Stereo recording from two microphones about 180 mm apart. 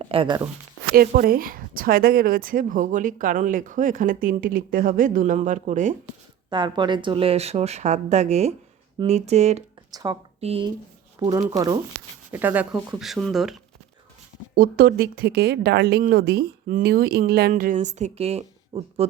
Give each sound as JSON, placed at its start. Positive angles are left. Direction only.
{"t": 0.0, "sound": "speech", "side_deg": -30}
{"t": 0.9, "sound": "speech", "side_deg": -55}
{"t": 6.5, "sound": "speech", "side_deg": -25}
{"t": 9.9, "sound": "speech", "side_deg": -20}
{"t": 10.4, "sound": "speech", "side_deg": -35}
{"t": 11.2, "sound": "speech", "side_deg": -20}
{"t": 14.5, "sound": "speech", "side_deg": -55}